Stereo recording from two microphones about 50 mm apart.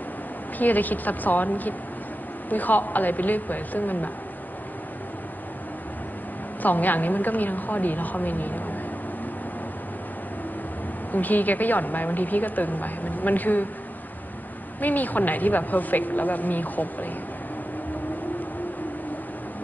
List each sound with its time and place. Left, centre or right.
0.6 s a woman's voice: left
6.6 s a woman's voice: left
11.1 s a woman's voice: left
14.8 s a woman's voice: left